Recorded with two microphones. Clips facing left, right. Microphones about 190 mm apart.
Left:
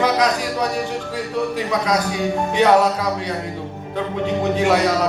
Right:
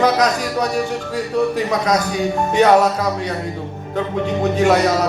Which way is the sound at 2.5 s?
45° right (ahead or behind).